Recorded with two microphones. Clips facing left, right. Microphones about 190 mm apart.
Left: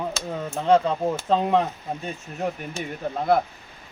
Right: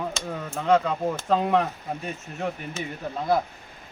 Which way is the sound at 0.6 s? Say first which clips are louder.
Left 2 dB; 30° left (ahead or behind).